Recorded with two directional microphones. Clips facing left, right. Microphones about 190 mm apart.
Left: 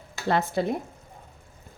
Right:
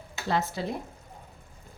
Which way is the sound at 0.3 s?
60° left (ahead or behind).